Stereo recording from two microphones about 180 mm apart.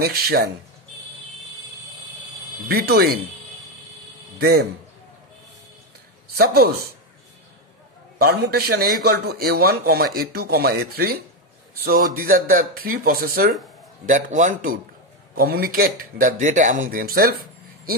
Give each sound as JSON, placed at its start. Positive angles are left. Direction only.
{"t": 0.0, "sound": "a man's voice", "side_deg": -60}
{"t": 2.7, "sound": "a man's voice", "side_deg": -60}
{"t": 4.4, "sound": "a man's voice", "side_deg": -60}
{"t": 6.3, "sound": "a man's voice", "side_deg": -60}
{"t": 8.2, "sound": "a man's voice", "side_deg": -60}
{"t": 14.0, "sound": "speech", "side_deg": -45}